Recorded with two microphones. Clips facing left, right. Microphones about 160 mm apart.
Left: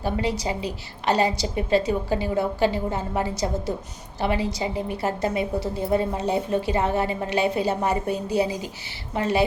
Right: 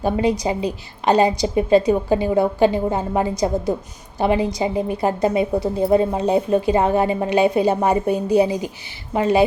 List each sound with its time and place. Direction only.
0.0 s a woman's voice: 20° right (ahead or behind)